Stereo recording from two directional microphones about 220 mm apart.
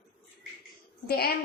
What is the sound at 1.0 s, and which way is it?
Speech, 45° left (ahead or behind).